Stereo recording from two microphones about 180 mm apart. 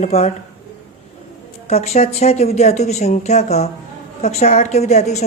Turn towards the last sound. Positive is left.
turn(degrees=40)  # may be behind; listen again after turning